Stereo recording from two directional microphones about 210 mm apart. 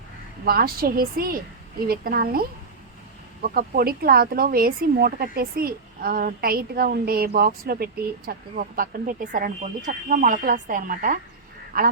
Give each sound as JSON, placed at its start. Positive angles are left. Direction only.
{"t": 0.4, "sound": "speech", "side_deg": -45}
{"t": 3.5, "sound": "speech", "side_deg": -45}